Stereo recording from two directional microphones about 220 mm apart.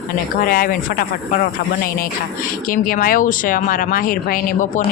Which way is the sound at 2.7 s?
40° left (ahead or behind).